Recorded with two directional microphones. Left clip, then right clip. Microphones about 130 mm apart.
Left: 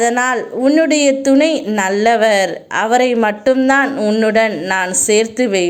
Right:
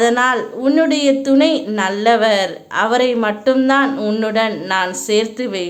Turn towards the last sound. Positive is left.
turn(degrees=30)  # may be behind; listen again after turning